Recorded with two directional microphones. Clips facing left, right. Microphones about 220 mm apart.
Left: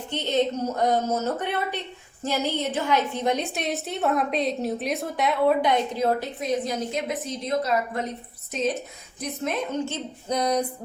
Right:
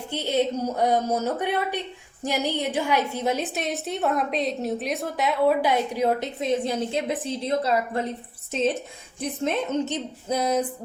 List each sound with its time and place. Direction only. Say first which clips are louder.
0.1 s a woman's voice: even; 10° right (ahead or behind); by 8.0 s 30° right (ahead or behind)
9.2 s a woman's voice: right 2 dB; 25° right (ahead or behind)
10.2 s a sound: even; 5° right (ahead or behind)